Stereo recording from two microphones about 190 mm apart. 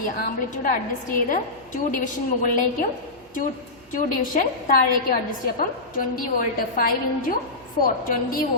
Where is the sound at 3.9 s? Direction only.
45° left (ahead or behind).